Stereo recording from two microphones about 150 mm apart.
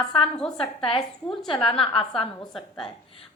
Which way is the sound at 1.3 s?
Centre (ahead or behind).